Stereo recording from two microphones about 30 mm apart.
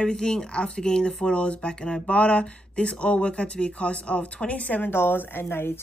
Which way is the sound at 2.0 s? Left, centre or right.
Left.